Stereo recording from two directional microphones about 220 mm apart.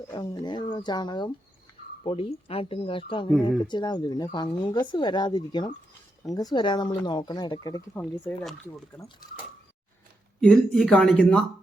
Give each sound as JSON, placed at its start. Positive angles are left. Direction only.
{"t": 0.1, "sound": "speech", "side_deg": 20}
{"t": 10.4, "sound": "speech", "side_deg": 0}